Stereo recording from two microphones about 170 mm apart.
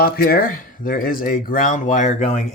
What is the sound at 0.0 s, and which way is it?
Speech, 60° left (ahead or behind).